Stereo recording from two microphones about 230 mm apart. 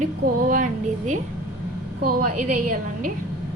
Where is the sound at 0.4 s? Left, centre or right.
Right.